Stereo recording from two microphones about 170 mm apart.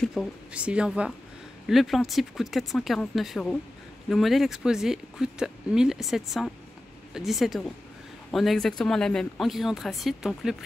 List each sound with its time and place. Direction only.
0.0 s speech: centre (ahead or behind)